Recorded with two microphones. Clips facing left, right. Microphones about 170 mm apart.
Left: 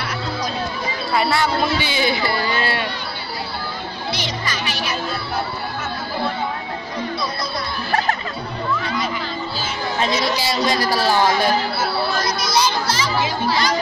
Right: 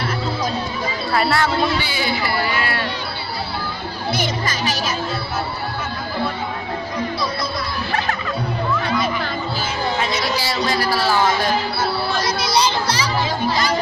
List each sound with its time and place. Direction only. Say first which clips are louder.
1.1 s speech: even; 5° left (ahead or behind)
1.8 s speech: left 2 dB; 20° left (ahead or behind)
4.1 s speech: right 4 dB; 45° right (ahead or behind)
10.4 s a man's voice: left 1 dB; 15° left (ahead or behind)
12.4 s children playing: right 2 dB; 30° right (ahead or behind)